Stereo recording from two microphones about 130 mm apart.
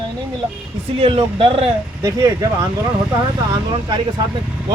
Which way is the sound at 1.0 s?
45° right (ahead or behind).